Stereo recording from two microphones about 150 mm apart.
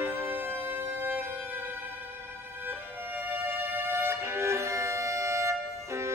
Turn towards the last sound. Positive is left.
turn(degrees=-20)  # may be behind; listen again after turning